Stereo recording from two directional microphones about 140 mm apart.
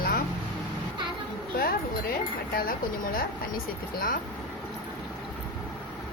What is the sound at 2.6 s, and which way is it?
Speech, 90° left.